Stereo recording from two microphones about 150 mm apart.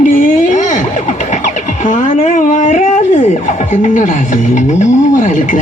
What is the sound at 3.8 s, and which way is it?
Speech, 60° left (ahead or behind).